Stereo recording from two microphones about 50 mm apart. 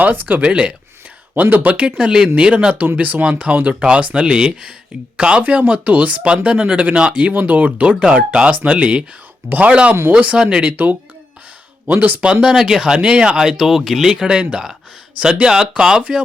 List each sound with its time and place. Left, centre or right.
0.0 s speech: right
0.4 s speech: right
1.4 s speech: right
2.0 s speech: centre
2.7 s speech: right
10.3 s speech: centre
10.6 s speech: right
12.2 s speech: centre